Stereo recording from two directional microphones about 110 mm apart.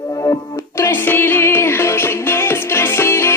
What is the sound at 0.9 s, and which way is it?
Music, 20° left (ahead or behind).